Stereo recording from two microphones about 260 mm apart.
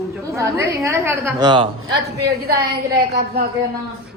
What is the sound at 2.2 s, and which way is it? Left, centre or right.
A woman's voice, right.